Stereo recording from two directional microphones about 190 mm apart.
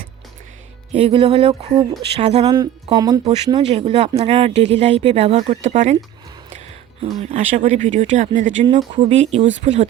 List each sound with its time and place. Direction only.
0.9 s speech: 30° right (ahead or behind)
2.5 s speech: 20° right (ahead or behind); by 6.0 s 40° right (ahead or behind)
7.0 s speech: 35° right (ahead or behind)